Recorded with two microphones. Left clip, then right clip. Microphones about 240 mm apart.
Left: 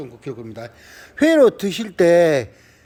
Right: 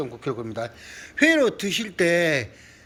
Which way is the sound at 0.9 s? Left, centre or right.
Left.